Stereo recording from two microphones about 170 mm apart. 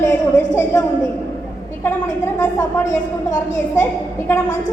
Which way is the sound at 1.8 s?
15° left (ahead or behind).